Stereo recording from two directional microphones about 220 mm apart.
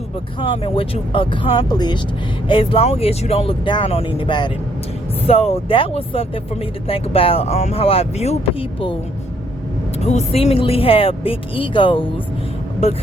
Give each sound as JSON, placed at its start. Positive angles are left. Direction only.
{"t": 0.3, "sound": "speech", "side_deg": 25}
{"t": 10.0, "sound": "speech", "side_deg": 30}